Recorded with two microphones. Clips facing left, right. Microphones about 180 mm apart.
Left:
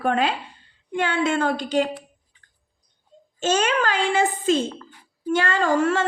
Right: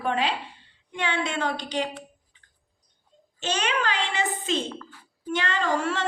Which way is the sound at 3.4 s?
45° left (ahead or behind).